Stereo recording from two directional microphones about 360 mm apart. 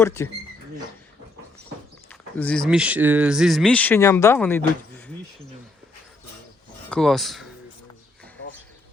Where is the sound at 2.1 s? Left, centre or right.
Centre.